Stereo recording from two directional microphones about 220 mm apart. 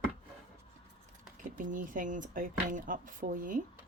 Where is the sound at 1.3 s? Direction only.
35° right (ahead or behind).